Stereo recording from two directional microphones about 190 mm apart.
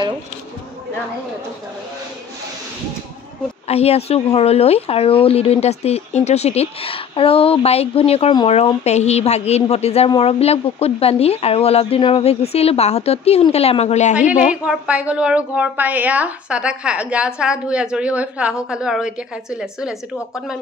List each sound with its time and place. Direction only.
3.6 s speech: 35° left (ahead or behind)
14.5 s a woman's voice: 5° right (ahead or behind)